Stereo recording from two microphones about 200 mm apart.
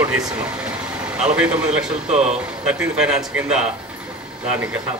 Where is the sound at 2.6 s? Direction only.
5° right (ahead or behind).